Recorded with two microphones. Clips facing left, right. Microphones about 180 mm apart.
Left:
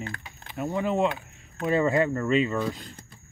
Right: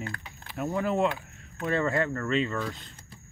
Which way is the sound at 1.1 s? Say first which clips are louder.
Left 1 dB; 20° left (ahead or behind).